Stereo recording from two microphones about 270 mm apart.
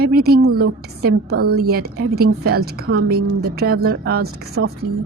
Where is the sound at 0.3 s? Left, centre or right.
Right.